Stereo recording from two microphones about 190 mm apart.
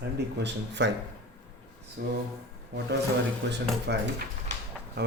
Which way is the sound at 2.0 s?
60° right (ahead or behind).